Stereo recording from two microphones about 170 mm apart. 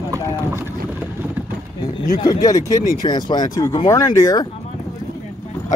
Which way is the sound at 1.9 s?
20° left (ahead or behind).